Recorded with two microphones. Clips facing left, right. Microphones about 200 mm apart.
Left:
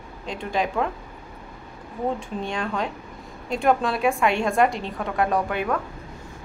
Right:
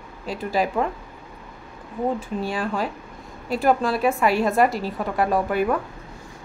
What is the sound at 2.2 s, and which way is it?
A woman's voice, 5° right (ahead or behind).